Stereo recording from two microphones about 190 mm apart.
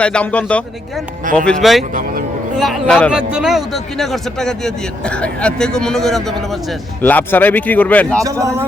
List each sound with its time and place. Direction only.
0.0 s speech: 5° left (ahead or behind)
1.2 s speech: 45° right (ahead or behind)
1.5 s a man's voice: centre (ahead or behind)
1.9 s speech: 45° right (ahead or behind)
2.6 s a man's voice: centre (ahead or behind)
8.2 s a man's voice: 15° right (ahead or behind)